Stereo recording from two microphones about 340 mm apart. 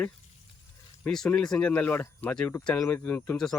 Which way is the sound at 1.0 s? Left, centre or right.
Centre.